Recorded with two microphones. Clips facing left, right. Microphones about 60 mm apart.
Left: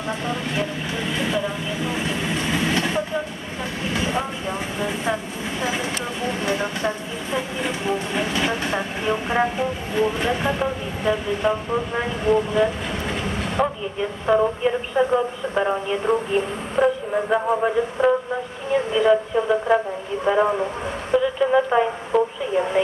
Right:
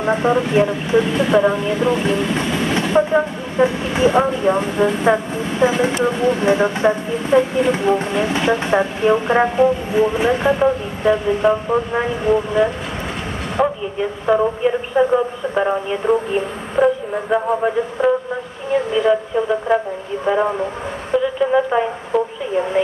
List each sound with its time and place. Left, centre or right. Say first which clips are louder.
0.0 s speech: right 10 dB; right
1.1 s speech: right 9 dB; right
2.7 s vehicle: right 7 dB; right
3.6 s speech: right 9 dB; right
4.2 s speech: right 11 dB; right
10.1 s a woman's voice: right 6 dB; centre